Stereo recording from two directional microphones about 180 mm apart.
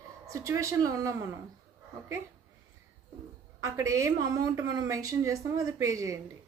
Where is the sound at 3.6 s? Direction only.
15° right (ahead or behind).